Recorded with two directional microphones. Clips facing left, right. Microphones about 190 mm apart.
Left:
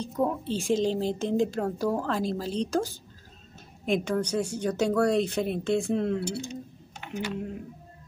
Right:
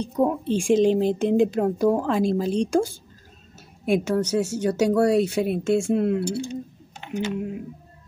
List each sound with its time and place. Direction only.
0.0 s a woman's voice: 15° right (ahead or behind)
7.0 s typing: 25° right (ahead or behind)